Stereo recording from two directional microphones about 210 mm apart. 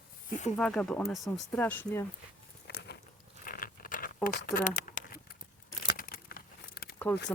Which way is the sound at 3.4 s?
40° left (ahead or behind).